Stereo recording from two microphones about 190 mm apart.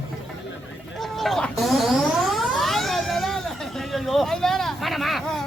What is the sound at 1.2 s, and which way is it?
Music, centre (ahead or behind).